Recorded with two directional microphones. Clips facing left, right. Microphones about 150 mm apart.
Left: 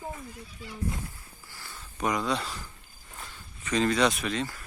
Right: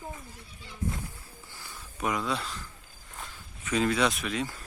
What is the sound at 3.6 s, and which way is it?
Speech, 5° right (ahead or behind).